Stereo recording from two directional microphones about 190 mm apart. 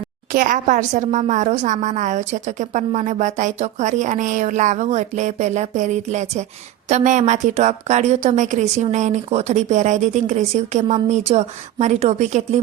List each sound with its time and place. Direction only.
0.3 s a woman's voice: 45° right (ahead or behind)